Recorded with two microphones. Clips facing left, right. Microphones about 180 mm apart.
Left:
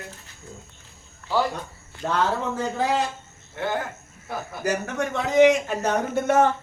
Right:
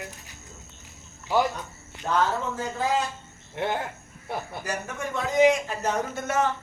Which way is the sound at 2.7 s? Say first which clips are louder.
Left 1 dB; 75° left (ahead or behind).